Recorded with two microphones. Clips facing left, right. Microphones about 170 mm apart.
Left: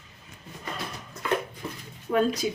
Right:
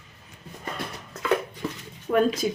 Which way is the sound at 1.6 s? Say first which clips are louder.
Right 4 dB; 90° right.